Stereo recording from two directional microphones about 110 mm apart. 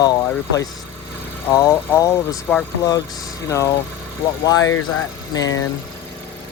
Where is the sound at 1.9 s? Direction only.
30° left (ahead or behind).